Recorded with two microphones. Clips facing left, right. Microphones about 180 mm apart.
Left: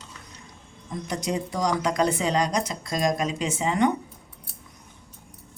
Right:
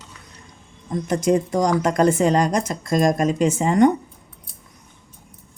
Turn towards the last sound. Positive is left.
turn(degrees=-45)  # may be behind; listen again after turning